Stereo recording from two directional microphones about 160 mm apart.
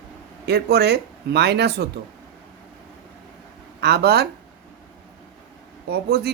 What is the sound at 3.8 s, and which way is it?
Speech, 90° right.